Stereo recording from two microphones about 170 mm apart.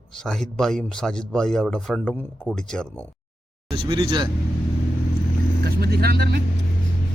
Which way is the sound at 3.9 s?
30° right (ahead or behind).